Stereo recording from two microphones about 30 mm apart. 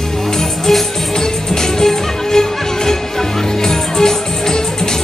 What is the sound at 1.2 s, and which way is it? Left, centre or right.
Music, centre.